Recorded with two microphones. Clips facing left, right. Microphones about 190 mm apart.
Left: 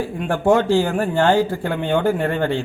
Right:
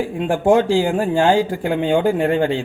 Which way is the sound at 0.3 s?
15° right (ahead or behind).